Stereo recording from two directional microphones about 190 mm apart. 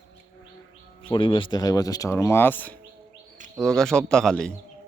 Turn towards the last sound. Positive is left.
turn(degrees=5)  # may be behind; listen again after turning